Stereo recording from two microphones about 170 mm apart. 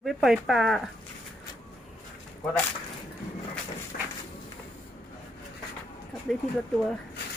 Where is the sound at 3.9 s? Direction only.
60° left (ahead or behind).